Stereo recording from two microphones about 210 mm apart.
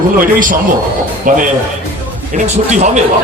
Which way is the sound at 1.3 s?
40° right (ahead or behind).